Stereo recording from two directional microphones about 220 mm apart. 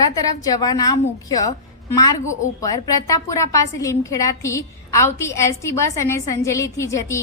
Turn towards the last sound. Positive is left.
turn(degrees=15)  # may be behind; listen again after turning